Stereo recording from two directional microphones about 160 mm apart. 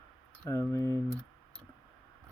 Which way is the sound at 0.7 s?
15° left (ahead or behind).